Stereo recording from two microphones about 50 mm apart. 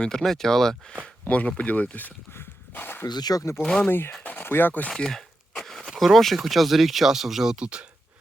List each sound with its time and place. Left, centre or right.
0.0 s speech: centre
1.3 s speech: left
2.3 s dog: left
3.3 s speech: left
3.8 s speech: left
4.2 s a sound: left
4.4 s speech: left
4.9 s a sound: centre
6.3 s speech: centre